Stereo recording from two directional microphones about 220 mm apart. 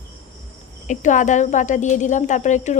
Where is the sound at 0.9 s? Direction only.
35° left (ahead or behind).